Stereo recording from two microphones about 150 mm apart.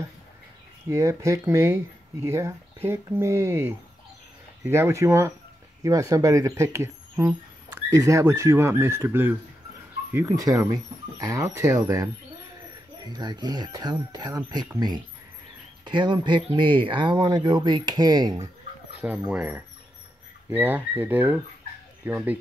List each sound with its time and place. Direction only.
0.8 s speech: 20° right (ahead or behind)
18.9 s speech: 10° right (ahead or behind)